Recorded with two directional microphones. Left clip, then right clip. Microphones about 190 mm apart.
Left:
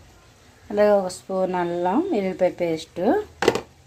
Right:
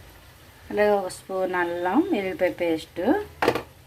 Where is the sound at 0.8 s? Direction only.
15° left (ahead or behind).